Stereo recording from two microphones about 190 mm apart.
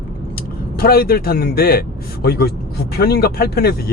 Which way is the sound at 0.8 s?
50° left (ahead or behind).